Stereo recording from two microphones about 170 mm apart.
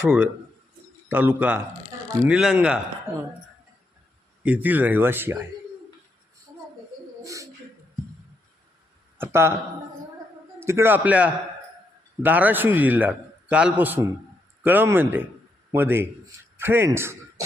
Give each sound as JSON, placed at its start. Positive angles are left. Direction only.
{"t": 1.0, "sound": "a man's voice", "side_deg": -10}
{"t": 4.4, "sound": "a man's voice", "side_deg": -10}
{"t": 7.3, "sound": "bird", "side_deg": -20}
{"t": 9.1, "sound": "speech", "side_deg": -15}
{"t": 10.6, "sound": "a man's voice", "side_deg": -15}